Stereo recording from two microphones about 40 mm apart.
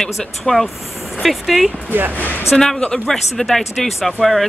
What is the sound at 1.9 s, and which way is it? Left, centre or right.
Speech, right.